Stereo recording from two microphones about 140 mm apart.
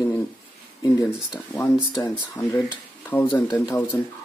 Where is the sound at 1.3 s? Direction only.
10° left (ahead or behind).